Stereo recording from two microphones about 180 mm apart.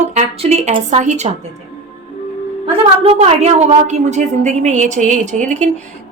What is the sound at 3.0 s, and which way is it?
A woman's voice, 35° right (ahead or behind).